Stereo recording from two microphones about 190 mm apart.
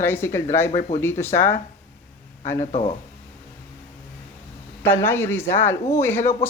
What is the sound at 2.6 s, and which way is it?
Speech, 30° left (ahead or behind).